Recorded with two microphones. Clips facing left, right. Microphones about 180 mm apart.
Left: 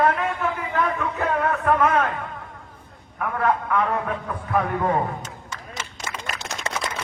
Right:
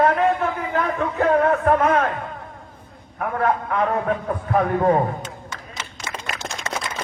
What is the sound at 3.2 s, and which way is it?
A man's voice, 30° right (ahead or behind).